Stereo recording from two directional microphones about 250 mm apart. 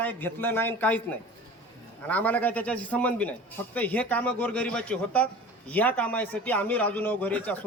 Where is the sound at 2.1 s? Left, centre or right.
Centre.